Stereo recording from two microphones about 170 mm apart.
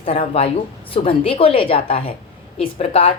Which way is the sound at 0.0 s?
35° left (ahead or behind).